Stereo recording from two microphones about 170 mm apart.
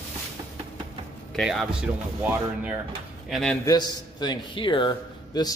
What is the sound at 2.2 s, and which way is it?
Speech, 10° right (ahead or behind).